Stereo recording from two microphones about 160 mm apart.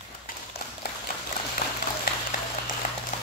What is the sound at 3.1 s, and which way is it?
Clip-clop, 50° left (ahead or behind).